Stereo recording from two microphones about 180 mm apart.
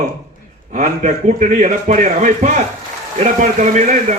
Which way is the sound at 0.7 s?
40° right (ahead or behind).